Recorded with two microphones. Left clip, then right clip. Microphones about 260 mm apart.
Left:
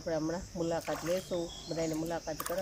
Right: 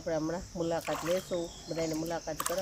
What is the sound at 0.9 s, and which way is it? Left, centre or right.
Speech, right.